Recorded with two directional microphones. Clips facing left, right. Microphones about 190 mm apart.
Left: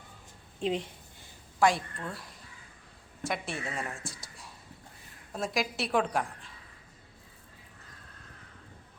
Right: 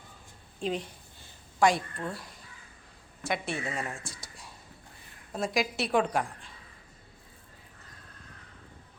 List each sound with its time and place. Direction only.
0.6 s a woman's voice: 25° left (ahead or behind)
1.5 s a woman's voice: centre (ahead or behind)